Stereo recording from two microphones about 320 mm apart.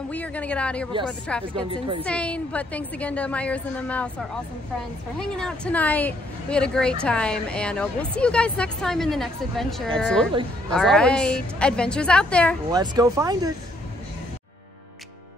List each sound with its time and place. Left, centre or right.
0.1 s a woman's voice: centre
1.5 s speech: centre
2.0 s a woman's voice: centre
5.4 s a woman's voice: centre
12.7 s speech: centre